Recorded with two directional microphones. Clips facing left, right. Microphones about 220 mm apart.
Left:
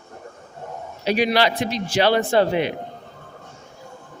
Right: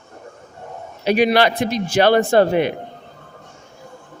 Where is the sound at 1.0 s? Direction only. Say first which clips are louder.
Right 4 dB; 55° right (ahead or behind).